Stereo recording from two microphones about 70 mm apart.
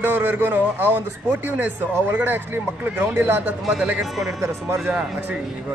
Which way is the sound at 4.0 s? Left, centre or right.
Centre.